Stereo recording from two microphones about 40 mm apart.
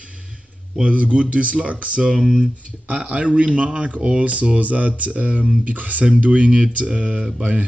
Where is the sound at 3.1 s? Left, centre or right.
Right.